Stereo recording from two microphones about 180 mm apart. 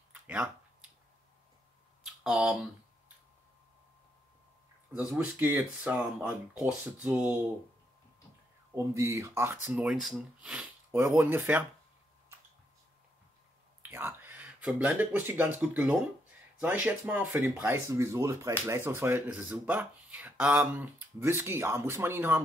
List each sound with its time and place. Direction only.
0.1 s a sound: 5° right (ahead or behind)
2.2 s speech: 5° right (ahead or behind)
4.9 s speech: 10° right (ahead or behind)
8.7 s speech: 15° right (ahead or behind)
13.8 s speech: 10° right (ahead or behind)